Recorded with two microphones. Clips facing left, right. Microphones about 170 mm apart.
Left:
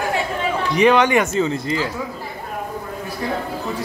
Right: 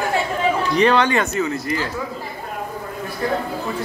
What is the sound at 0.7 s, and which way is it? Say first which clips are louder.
Speech: left 3 dB; 15° left (ahead or behind).